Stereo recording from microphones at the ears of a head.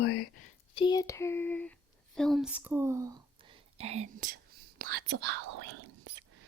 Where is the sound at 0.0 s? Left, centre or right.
Left.